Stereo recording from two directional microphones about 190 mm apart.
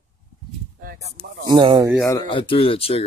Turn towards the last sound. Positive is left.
turn(degrees=30)  # may be behind; listen again after turning